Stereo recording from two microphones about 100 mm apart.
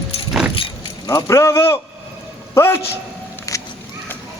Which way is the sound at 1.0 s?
30° left (ahead or behind).